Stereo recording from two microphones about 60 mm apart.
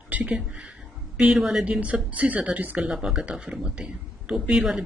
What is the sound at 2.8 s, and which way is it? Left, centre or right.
A man's voice, centre.